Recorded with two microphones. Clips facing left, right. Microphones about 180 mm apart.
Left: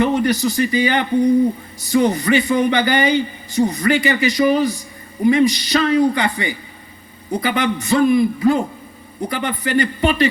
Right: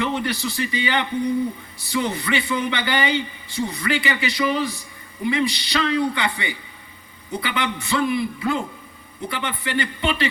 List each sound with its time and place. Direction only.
0.0 s a man's voice: 40° left (ahead or behind)